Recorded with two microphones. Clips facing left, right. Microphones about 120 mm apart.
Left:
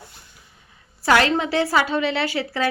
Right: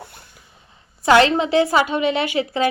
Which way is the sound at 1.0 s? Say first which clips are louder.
Right 4 dB; 20° right (ahead or behind).